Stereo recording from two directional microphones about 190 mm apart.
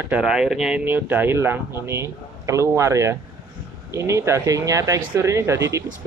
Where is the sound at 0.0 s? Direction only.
5° right (ahead or behind).